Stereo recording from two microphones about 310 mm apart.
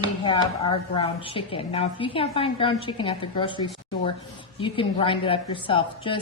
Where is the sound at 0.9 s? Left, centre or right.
Centre.